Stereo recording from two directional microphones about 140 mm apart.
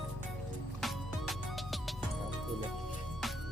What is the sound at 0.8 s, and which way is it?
Music, centre (ahead or behind).